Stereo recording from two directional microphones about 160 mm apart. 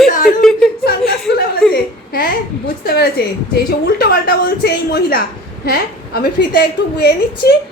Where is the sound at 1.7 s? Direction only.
65° left (ahead or behind).